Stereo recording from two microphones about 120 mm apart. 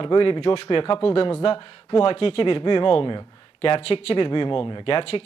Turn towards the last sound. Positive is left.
turn(degrees=55)  # may be behind; listen again after turning